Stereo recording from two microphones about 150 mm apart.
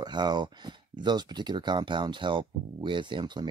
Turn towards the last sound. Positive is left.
turn(degrees=-30)  # may be behind; listen again after turning